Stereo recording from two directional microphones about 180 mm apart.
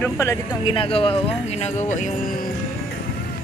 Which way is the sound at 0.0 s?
15° left (ahead or behind).